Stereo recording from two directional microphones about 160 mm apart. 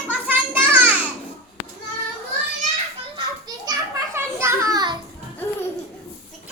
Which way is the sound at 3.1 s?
25° right (ahead or behind).